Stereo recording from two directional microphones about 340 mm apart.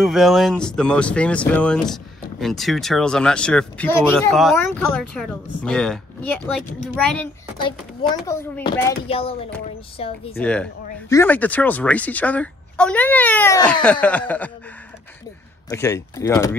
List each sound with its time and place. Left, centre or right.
0.0 s speech: centre
10.3 s speech: centre
15.7 s speech: centre